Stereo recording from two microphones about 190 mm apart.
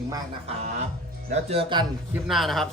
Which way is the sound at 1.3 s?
30° right (ahead or behind).